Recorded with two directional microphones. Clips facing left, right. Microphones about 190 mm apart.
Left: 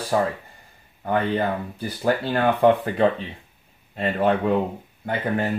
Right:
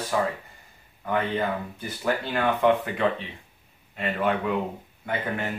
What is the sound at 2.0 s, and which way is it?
Speech, 35° left (ahead or behind).